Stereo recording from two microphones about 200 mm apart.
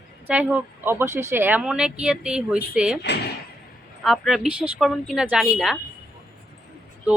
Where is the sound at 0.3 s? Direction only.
5° right (ahead or behind).